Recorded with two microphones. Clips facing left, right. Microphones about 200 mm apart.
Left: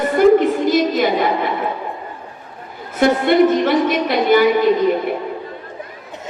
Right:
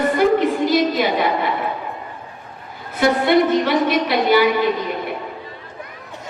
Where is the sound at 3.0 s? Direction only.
50° left (ahead or behind).